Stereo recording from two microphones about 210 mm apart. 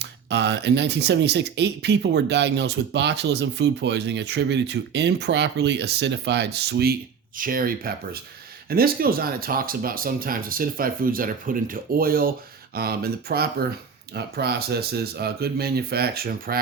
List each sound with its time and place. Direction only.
0.0 s speech: 55° right (ahead or behind)